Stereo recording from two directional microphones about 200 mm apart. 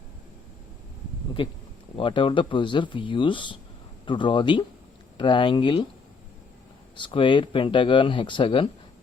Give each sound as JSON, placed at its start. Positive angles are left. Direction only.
{"t": 2.0, "sound": "speech", "side_deg": 25}
{"t": 6.9, "sound": "speech", "side_deg": 25}